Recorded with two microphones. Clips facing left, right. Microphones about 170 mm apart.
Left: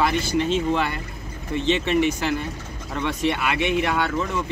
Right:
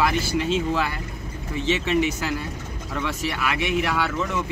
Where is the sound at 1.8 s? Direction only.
55° left (ahead or behind).